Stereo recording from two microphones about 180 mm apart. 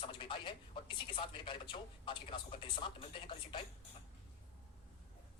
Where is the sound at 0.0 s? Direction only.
30° left (ahead or behind).